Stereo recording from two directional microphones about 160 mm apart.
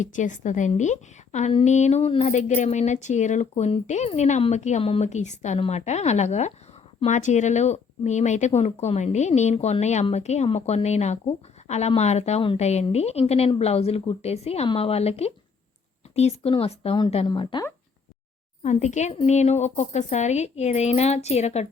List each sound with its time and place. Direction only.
0.0 s speech: 50° left (ahead or behind); by 17.7 s 30° left (ahead or behind)
18.6 s speech: 50° left (ahead or behind)